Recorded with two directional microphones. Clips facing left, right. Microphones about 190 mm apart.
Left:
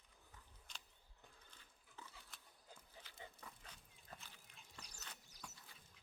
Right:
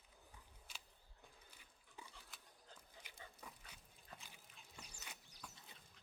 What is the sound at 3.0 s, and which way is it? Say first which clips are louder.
Dog: even; 15° right (ahead or behind).